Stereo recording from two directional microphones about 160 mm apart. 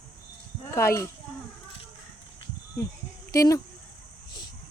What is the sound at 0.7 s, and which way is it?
Speech, 15° left (ahead or behind).